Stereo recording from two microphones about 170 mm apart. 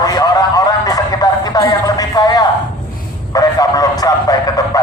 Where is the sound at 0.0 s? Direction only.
25° left (ahead or behind).